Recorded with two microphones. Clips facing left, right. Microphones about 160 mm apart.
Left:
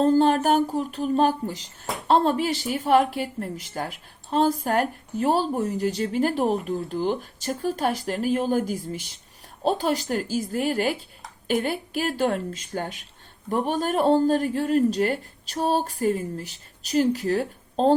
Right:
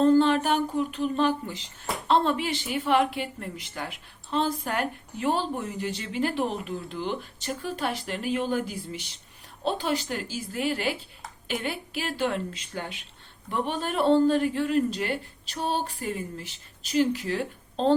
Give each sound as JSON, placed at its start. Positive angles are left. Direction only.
{"t": 0.0, "sound": "speech", "side_deg": 40}